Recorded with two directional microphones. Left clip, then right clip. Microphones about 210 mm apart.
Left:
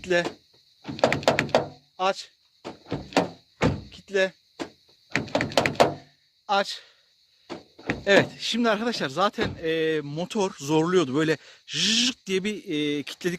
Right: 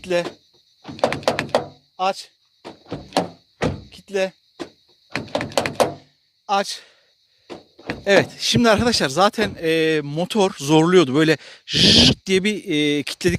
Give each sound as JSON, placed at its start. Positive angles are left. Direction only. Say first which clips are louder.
{"t": 0.0, "sound": "speech", "louder": "right 2 dB", "side_deg": -25}
{"t": 0.8, "sound": "thunk", "louder": "right 2 dB", "side_deg": 0}
{"t": 2.0, "sound": "speech", "louder": "right 3 dB", "side_deg": -25}
{"t": 2.8, "sound": "thunk", "louder": "right 2 dB", "side_deg": 0}
{"t": 3.8, "sound": "door", "louder": "right 2 dB", "side_deg": -25}
{"t": 5.0, "sound": "thunk", "louder": "right 1 dB", "side_deg": 0}
{"t": 6.0, "sound": "music", "louder": "left 1 dB", "side_deg": -30}
{"t": 8.0, "sound": "speech", "louder": "right 4 dB", "side_deg": -30}